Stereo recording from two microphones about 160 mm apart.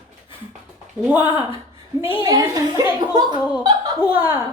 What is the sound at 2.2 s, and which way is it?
A woman's voice, 25° right (ahead or behind).